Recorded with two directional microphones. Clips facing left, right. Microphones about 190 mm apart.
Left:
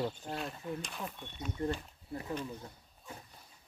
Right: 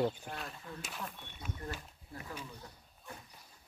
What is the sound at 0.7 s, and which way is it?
Speech, 20° left (ahead or behind).